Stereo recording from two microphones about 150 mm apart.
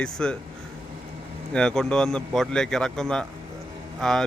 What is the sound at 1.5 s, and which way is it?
Speech, 5° left (ahead or behind).